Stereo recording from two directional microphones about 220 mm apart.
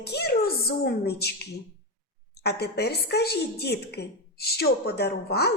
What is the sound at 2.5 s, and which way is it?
A woman's voice, 50° left (ahead or behind).